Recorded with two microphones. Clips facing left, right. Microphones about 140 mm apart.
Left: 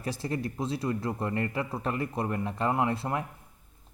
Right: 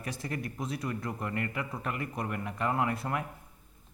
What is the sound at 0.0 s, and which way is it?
Speech, 30° left (ahead or behind).